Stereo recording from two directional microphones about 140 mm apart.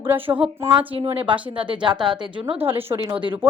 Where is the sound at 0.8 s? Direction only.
40° right (ahead or behind).